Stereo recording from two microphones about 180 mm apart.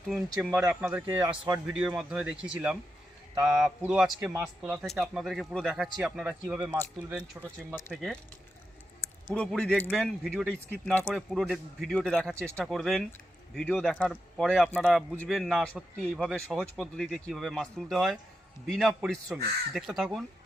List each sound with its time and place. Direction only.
0.1 s speech: 5° right (ahead or behind)
1.2 s speech: 25° right (ahead or behind)
1.5 s speech: 5° right (ahead or behind)
9.3 s speech: 5° left (ahead or behind)